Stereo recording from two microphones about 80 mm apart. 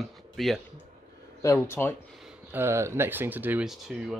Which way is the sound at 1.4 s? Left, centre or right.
Left.